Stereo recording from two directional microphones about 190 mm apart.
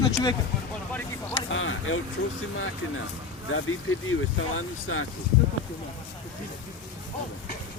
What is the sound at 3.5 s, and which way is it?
Speech, 90° left.